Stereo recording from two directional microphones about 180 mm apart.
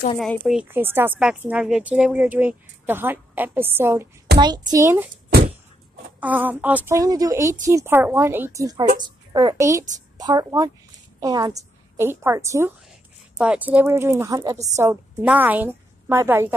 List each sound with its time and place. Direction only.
0.2 s speech: centre (ahead or behind)
0.7 s speech: 10° right (ahead or behind)
6.2 s a woman's voice: 10° right (ahead or behind)